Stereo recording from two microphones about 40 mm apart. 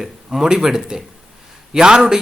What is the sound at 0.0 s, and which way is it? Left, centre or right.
Speech, centre.